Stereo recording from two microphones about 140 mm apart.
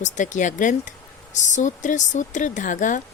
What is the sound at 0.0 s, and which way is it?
Speech, 60° left (ahead or behind).